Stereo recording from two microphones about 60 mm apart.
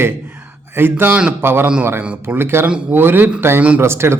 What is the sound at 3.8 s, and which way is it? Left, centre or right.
Speech, right.